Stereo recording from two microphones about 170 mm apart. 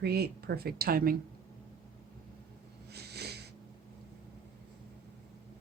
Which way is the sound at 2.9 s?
70° right (ahead or behind).